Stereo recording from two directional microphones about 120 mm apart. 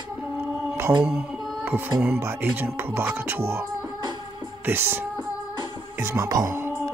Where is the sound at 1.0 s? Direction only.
10° right (ahead or behind).